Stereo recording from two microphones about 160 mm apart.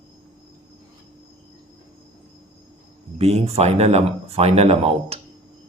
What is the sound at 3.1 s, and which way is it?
Speech, 40° right (ahead or behind).